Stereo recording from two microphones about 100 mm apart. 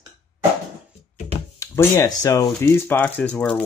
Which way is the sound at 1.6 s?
30° left (ahead or behind).